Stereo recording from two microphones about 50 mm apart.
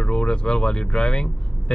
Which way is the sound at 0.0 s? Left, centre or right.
Left.